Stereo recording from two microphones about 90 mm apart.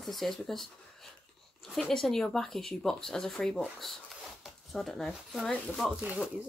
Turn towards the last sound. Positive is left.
turn(degrees=-15)  # may be behind; listen again after turning